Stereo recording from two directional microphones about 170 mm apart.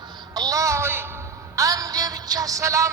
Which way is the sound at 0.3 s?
20° right (ahead or behind).